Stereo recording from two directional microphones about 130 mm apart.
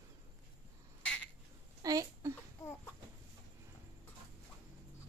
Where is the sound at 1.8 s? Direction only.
30° right (ahead or behind).